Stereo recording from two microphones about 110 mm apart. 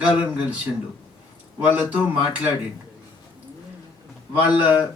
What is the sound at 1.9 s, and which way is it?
Speech, 15° right (ahead or behind).